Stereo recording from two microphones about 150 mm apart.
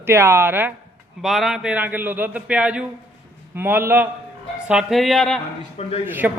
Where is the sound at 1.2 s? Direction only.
Centre (ahead or behind).